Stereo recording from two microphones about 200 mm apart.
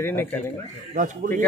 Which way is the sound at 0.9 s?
45° right (ahead or behind).